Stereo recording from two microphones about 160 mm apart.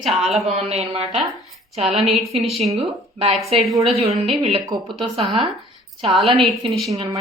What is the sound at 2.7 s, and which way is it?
Speech, 40° right (ahead or behind).